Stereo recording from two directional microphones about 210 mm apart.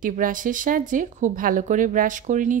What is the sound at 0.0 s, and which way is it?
A woman's voice, 40° right (ahead or behind).